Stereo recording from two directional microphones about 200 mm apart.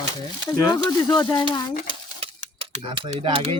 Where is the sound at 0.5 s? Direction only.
20° left (ahead or behind).